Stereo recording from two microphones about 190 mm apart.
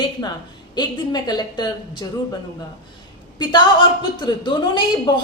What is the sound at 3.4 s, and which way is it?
A woman's voice, 25° left (ahead or behind).